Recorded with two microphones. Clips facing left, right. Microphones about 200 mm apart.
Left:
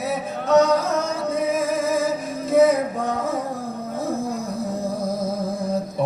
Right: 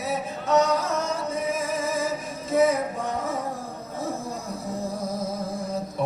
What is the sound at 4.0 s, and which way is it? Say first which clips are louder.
Music: left 5 dB; 35° left (ahead or behind).